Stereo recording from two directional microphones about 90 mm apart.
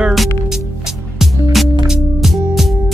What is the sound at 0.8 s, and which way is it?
Music, 5° right (ahead or behind).